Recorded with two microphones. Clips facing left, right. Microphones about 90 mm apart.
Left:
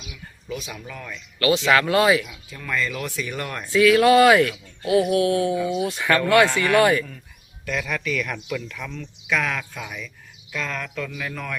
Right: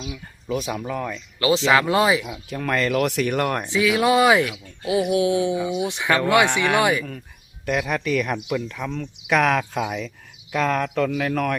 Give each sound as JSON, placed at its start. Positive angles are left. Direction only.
{"t": 0.0, "sound": "a sound", "side_deg": -30}
{"t": 0.6, "sound": "speech", "side_deg": -50}
{"t": 0.9, "sound": "speech", "side_deg": -35}
{"t": 2.5, "sound": "speech", "side_deg": -65}
{"t": 3.6, "sound": "speech", "side_deg": -20}
{"t": 7.6, "sound": "speech", "side_deg": -50}
{"t": 8.4, "sound": "speech", "side_deg": -30}
{"t": 8.9, "sound": "speech", "side_deg": -55}
{"t": 10.5, "sound": "speech", "side_deg": -50}
{"t": 10.9, "sound": "speech", "side_deg": -65}